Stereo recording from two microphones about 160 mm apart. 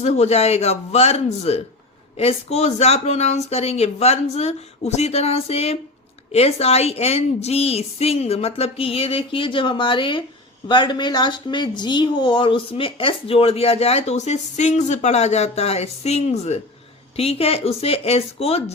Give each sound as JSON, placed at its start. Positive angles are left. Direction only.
{"t": 0.0, "sound": "speech", "side_deg": 45}